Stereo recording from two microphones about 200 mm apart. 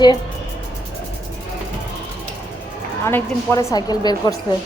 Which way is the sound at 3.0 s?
10° left (ahead or behind).